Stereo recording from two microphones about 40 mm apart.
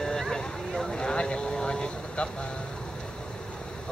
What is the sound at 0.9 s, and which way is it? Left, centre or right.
Vehicle, left.